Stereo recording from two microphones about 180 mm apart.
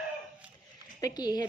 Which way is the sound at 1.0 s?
20° left (ahead or behind).